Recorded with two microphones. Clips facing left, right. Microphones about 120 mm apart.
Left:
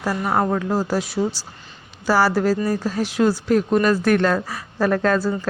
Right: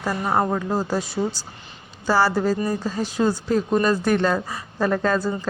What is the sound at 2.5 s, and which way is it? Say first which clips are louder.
Speech: left 2 dB; 15° right (ahead or behind).